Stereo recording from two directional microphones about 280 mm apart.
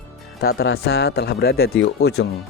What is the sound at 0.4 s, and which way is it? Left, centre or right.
Speech, left.